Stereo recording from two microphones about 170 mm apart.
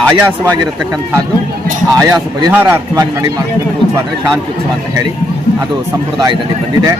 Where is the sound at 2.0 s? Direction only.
20° right (ahead or behind).